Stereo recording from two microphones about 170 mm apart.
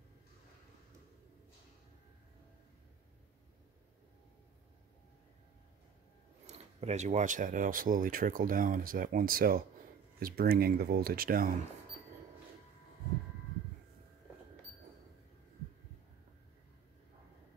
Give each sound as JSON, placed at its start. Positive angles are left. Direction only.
{"t": 6.4, "sound": "speech", "side_deg": -40}